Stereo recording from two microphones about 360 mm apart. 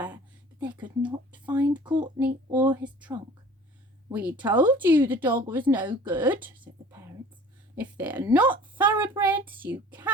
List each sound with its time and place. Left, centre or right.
0.6 s speech: centre
2.5 s a sound: centre
4.1 s a woman's voice: centre
7.8 s a woman's voice: centre